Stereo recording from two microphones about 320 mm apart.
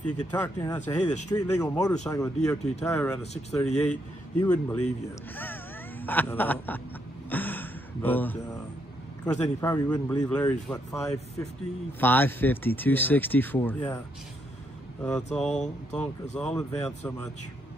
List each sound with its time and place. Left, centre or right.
0.0 s speech: centre
3.2 s speech: centre
4.4 s speech: centre
5.3 s a sound: centre
9.2 s speech: centre
15.3 s speech: centre